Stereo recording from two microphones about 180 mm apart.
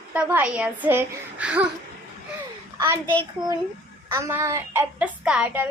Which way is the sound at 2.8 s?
15° right (ahead or behind).